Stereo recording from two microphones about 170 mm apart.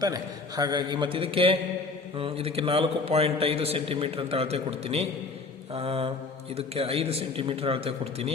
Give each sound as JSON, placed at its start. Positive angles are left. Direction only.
{"t": 0.0, "sound": "a man's voice", "side_deg": -20}